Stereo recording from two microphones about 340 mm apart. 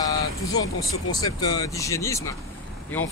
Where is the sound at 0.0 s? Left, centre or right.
Centre.